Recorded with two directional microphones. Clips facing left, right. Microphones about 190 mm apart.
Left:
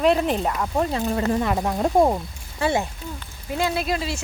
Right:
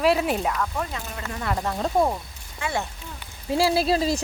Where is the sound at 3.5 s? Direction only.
30° right (ahead or behind).